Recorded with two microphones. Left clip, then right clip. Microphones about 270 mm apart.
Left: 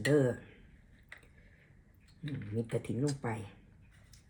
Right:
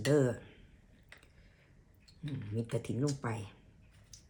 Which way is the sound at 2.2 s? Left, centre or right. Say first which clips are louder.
Left 2 dB; centre.